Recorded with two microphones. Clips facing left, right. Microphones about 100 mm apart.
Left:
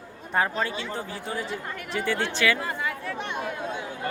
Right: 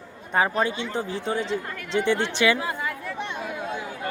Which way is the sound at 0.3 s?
Centre (ahead or behind).